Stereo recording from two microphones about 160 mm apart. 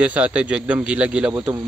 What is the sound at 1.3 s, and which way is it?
Speech, 20° right (ahead or behind).